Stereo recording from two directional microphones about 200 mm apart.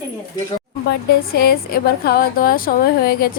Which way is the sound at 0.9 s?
50° left (ahead or behind).